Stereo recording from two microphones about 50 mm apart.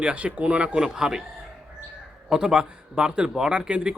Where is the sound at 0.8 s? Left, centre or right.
Centre.